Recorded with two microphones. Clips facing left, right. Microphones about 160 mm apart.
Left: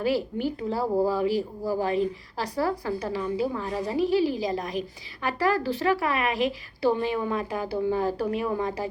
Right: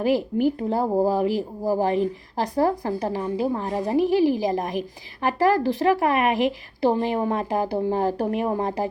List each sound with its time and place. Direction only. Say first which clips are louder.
0.0 s speech: right 5 dB; 50° right (ahead or behind)
6.9 s speech: right 3 dB; 45° right (ahead or behind)
8.4 s a woman's voice: right 3 dB; 40° right (ahead or behind)